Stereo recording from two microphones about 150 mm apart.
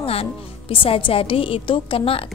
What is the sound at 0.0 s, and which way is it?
Speech, 40° left (ahead or behind).